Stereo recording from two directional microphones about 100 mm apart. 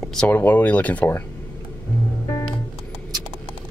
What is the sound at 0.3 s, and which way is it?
Speech, 20° left (ahead or behind).